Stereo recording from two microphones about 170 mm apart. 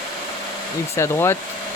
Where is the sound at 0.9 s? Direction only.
15° left (ahead or behind).